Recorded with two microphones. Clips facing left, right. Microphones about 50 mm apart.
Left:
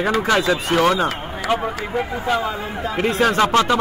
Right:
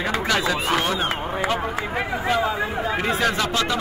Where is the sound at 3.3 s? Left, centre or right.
Left.